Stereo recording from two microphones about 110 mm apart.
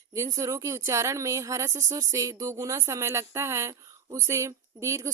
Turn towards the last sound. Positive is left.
turn(degrees=-25)  # may be behind; listen again after turning